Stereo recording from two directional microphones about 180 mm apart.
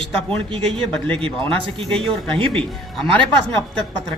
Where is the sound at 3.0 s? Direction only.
5° left (ahead or behind).